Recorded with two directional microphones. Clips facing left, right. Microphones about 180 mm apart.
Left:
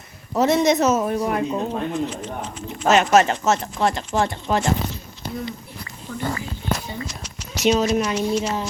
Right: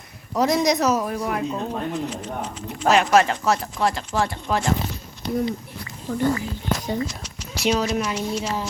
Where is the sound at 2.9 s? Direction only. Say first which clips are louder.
Left 1 dB; 5° left (ahead or behind).